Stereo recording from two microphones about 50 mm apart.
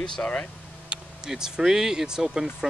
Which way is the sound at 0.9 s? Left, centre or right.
Centre.